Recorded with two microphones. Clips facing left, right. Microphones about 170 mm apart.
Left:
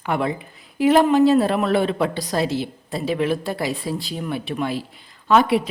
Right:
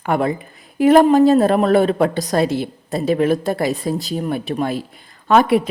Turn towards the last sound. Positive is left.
turn(degrees=-50)  # may be behind; listen again after turning